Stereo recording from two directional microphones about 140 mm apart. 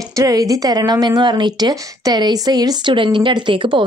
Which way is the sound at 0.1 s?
25° right (ahead or behind).